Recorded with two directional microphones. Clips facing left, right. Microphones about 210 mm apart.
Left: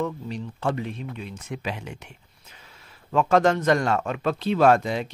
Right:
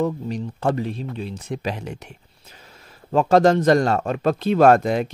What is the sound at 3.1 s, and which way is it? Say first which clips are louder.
Speech: right 4 dB; 35° right (ahead or behind).